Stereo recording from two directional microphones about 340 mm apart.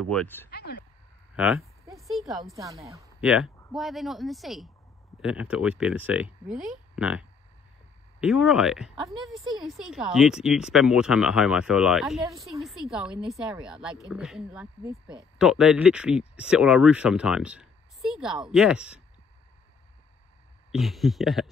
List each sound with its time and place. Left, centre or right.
0.0 s speech: centre
0.5 s speech: left
1.3 s a woman's voice: centre
20.7 s speech: centre